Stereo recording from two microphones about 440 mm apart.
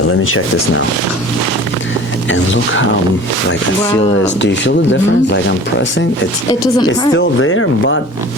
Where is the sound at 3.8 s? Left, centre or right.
Centre.